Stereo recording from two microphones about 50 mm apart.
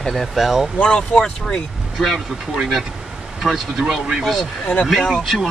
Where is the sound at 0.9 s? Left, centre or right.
Centre.